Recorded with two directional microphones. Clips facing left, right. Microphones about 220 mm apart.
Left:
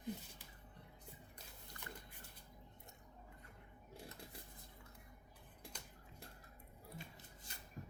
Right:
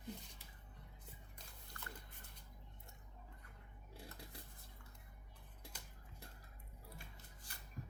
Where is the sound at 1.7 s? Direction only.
15° left (ahead or behind).